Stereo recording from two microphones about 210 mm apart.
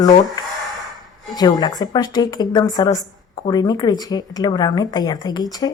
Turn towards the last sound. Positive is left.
turn(degrees=20)  # may be behind; listen again after turning